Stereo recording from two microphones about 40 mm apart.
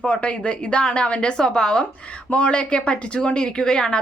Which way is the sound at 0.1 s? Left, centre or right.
Left.